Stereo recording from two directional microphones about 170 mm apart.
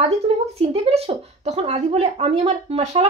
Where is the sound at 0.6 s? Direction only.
35° right (ahead or behind).